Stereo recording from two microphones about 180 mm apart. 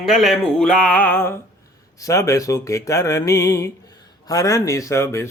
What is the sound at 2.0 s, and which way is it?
Speech, 20° left (ahead or behind).